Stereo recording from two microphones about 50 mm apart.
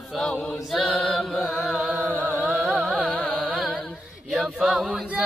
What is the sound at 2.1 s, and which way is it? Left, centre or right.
Chant, right.